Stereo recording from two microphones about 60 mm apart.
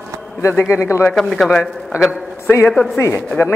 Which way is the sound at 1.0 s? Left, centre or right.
Centre.